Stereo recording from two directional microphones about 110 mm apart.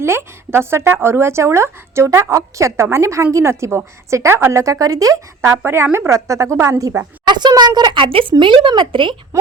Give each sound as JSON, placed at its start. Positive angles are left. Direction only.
{"t": 0.0, "sound": "speech", "side_deg": -20}
{"t": 5.5, "sound": "speech", "side_deg": -20}
{"t": 7.3, "sound": "speech", "side_deg": -40}
{"t": 9.3, "sound": "speech", "side_deg": -30}